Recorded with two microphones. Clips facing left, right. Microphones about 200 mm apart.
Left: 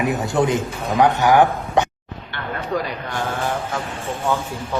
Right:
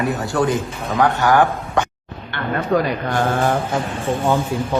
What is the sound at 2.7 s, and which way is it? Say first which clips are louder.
Speech: right 6 dB; 55° right (ahead or behind).